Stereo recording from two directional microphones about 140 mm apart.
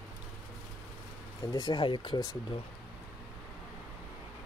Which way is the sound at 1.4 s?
25° left (ahead or behind).